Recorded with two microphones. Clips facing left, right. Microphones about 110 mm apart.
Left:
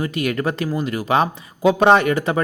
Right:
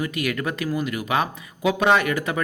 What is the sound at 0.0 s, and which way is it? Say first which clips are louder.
Speech: left 4 dB; 30° left (ahead or behind).